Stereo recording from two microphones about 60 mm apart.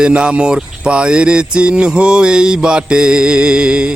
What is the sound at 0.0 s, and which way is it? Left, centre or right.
Mantra, centre.